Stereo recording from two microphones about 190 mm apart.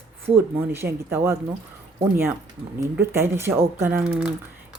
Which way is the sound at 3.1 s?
15° right (ahead or behind).